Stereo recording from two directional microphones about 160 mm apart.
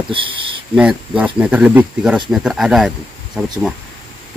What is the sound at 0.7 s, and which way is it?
Speech, 5° right (ahead or behind).